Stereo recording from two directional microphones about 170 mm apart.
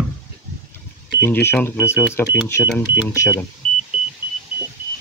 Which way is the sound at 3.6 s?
35° right (ahead or behind).